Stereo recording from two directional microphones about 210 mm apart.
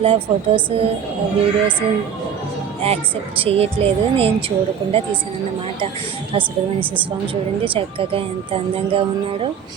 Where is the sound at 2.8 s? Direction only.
25° right (ahead or behind).